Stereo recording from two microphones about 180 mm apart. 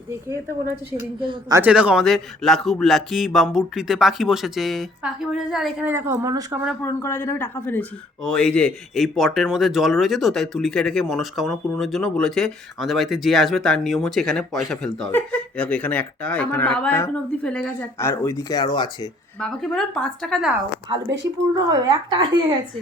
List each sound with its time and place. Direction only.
1.2 s speech: 25° right (ahead or behind)
1.5 s speech: 5° right (ahead or behind)
6.8 s speech: 15° left (ahead or behind)
19.4 s speech: 5° left (ahead or behind)
21.7 s speech: 25° right (ahead or behind)